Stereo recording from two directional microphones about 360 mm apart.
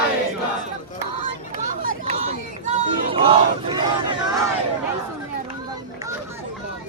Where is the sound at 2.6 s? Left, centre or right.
Centre.